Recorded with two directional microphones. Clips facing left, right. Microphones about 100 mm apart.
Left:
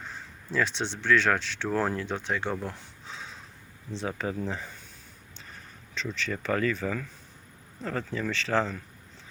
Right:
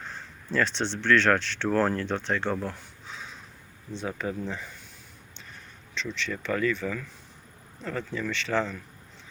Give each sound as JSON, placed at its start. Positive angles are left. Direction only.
{"t": 0.1, "sound": "speech", "side_deg": 10}
{"t": 2.6, "sound": "a sound", "side_deg": 25}
{"t": 4.2, "sound": "speech", "side_deg": 30}
{"t": 5.9, "sound": "speech", "side_deg": 40}